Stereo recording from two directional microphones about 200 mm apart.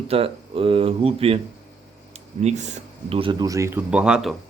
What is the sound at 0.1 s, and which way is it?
Speech, 30° right (ahead or behind).